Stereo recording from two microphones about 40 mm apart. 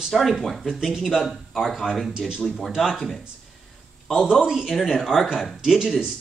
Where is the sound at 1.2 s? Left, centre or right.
Centre.